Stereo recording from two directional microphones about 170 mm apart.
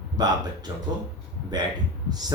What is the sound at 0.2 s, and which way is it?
Speech, 25° right (ahead or behind).